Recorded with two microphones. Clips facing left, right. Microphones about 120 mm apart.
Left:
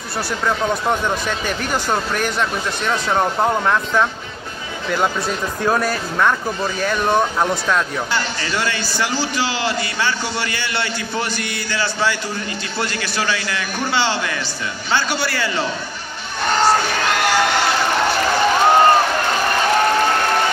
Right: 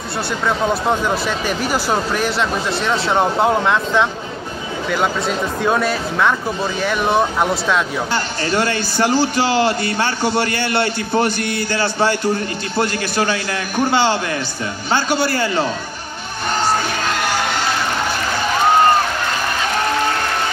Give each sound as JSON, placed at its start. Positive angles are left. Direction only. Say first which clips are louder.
{"t": 1.2, "sound": "speech", "louder": "right 3 dB", "side_deg": -5}
{"t": 8.1, "sound": "a man's voice", "louder": "right 3 dB", "side_deg": -50}